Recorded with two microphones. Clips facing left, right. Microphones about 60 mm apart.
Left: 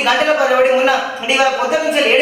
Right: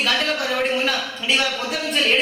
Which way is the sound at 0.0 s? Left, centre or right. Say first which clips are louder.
Left 9 dB; centre.